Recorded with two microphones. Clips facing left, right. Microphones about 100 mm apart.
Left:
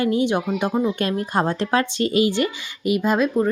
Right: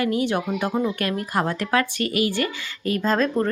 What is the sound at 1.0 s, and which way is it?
Speech, 25° left (ahead or behind).